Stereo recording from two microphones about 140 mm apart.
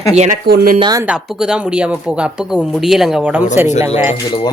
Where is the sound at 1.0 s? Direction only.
5° right (ahead or behind).